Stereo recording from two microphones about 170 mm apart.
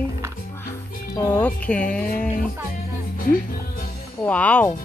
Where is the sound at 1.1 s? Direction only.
10° left (ahead or behind).